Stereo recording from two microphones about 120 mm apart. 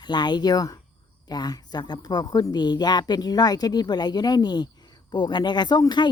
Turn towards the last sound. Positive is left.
turn(degrees=35)  # may be behind; listen again after turning